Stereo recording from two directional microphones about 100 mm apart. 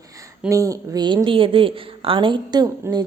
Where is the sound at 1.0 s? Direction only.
50° right (ahead or behind).